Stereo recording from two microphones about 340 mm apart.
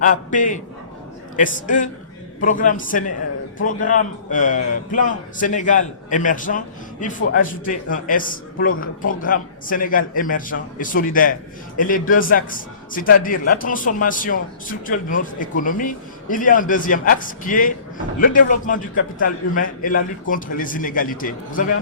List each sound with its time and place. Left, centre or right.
0.0 s a man's voice: left